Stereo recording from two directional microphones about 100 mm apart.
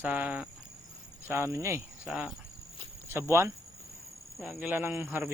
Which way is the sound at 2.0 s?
5° right (ahead or behind).